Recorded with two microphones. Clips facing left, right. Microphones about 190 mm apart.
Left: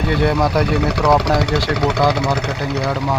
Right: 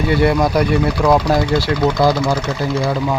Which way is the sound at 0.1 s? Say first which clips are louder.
Right 2 dB; 5° right (ahead or behind).